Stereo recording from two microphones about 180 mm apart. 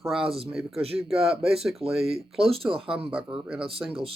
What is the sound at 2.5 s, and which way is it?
Speech, 30° right (ahead or behind).